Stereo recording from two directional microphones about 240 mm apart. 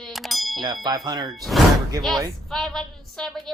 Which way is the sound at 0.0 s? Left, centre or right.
Centre.